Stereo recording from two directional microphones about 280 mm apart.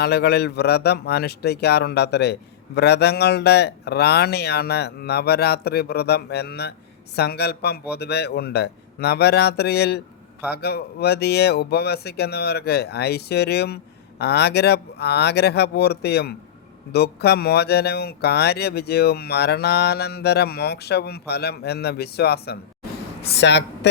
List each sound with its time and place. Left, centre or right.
0.0 s a man's voice: left